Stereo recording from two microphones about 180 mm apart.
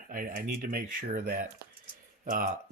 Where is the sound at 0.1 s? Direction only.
50° right (ahead or behind).